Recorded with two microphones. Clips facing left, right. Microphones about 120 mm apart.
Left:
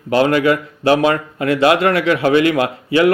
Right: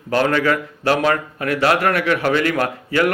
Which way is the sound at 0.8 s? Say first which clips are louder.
Left 4 dB; 20° left (ahead or behind).